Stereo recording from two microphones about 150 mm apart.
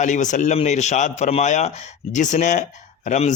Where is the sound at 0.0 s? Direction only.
55° left (ahead or behind).